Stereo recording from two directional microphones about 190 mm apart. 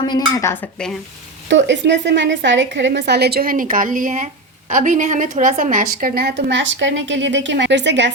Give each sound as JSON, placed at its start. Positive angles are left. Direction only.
{"t": 0.0, "sound": "speech", "side_deg": 20}
{"t": 1.5, "sound": "a woman's voice", "side_deg": -70}